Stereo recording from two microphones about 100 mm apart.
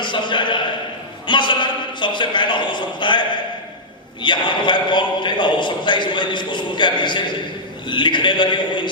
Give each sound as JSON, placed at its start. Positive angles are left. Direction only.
{"t": 0.0, "sound": "a man's voice", "side_deg": 50}
{"t": 1.3, "sound": "a sound", "side_deg": 50}
{"t": 4.2, "sound": "a man's voice", "side_deg": 50}